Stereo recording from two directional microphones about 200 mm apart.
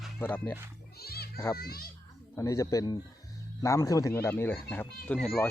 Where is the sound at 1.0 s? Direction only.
50° left (ahead or behind).